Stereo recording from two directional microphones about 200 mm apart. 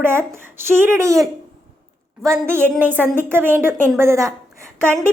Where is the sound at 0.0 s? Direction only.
10° right (ahead or behind).